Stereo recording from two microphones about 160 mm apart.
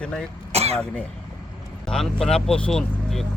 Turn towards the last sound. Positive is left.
turn(degrees=5)  # may be behind; listen again after turning